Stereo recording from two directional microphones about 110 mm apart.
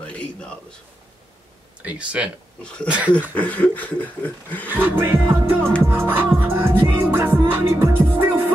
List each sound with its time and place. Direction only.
0.0 s a sound: 10° left (ahead or behind)
1.8 s speech: 10° right (ahead or behind)
3.3 s snicker: 15° left (ahead or behind)
4.6 s speech: 15° right (ahead or behind)
5.3 s music: 20° right (ahead or behind)